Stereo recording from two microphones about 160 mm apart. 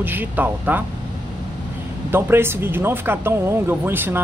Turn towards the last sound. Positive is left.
turn(degrees=-15)  # may be behind; listen again after turning